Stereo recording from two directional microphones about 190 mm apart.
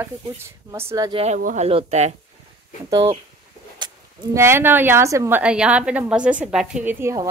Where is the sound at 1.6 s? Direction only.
35° right (ahead or behind).